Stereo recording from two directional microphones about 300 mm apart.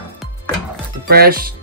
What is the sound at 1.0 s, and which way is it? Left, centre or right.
Speech, right.